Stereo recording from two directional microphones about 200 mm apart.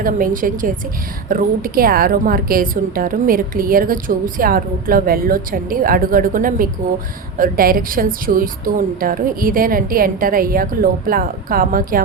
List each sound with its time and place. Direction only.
0.0 s a woman's voice: 45° right (ahead or behind)